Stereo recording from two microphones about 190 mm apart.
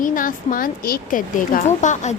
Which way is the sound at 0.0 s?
45° left (ahead or behind).